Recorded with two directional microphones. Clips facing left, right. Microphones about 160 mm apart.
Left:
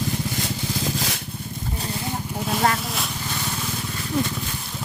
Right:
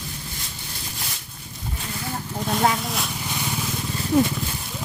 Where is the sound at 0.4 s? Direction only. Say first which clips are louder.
Left 12 dB; 90° left.